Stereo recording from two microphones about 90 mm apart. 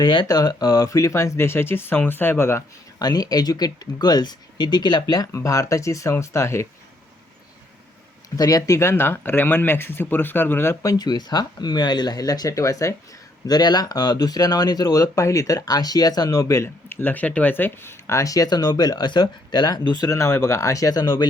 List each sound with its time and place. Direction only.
0.0 s speech: 60° left (ahead or behind)
0.3 s speech: 45° left (ahead or behind); by 2.6 s 30° left (ahead or behind)
3.0 s speech: 45° left (ahead or behind)
5.3 s speech: 35° left (ahead or behind)
8.4 s speech: 40° left (ahead or behind); by 10.8 s 25° left (ahead or behind)
10.8 s speech: 50° left (ahead or behind)
13.5 s speech: 50° left (ahead or behind)
20.1 s speech: 30° left (ahead or behind)